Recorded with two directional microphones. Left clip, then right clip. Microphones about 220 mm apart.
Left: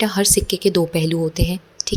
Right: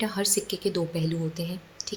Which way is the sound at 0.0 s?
30° left (ahead or behind).